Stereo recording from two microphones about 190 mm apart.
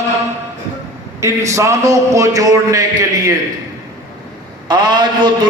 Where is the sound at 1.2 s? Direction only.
15° right (ahead or behind).